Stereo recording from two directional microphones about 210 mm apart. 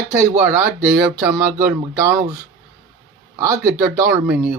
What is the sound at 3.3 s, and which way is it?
Speech, 15° right (ahead or behind).